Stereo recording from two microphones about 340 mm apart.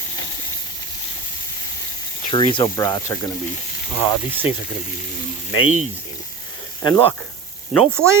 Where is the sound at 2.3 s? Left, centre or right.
Centre.